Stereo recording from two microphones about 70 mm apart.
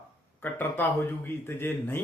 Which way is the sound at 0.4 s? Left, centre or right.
Left.